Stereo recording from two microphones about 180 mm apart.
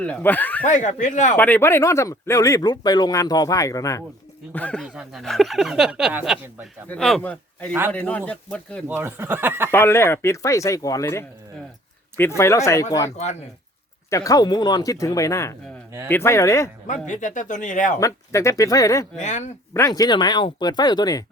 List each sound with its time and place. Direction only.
0.0 s speech: 10° left (ahead or behind)
0.6 s speech: 45° left (ahead or behind)
1.4 s speech: 10° left (ahead or behind)
4.5 s speech: 5° left (ahead or behind)
8.9 s speech: 10° right (ahead or behind)
9.7 s speech: 15° left (ahead or behind)
13.1 s speech: 40° left (ahead or behind)
14.1 s speech: 20° left (ahead or behind)
16.8 s speech: 45° left (ahead or behind)
18.0 s speech: 15° left (ahead or behind)
19.1 s speech: 40° left (ahead or behind)
19.7 s speech: 20° left (ahead or behind)